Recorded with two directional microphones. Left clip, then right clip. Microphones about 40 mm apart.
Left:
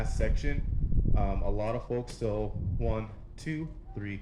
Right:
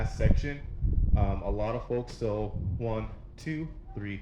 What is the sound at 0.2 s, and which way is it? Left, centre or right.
Speech, left.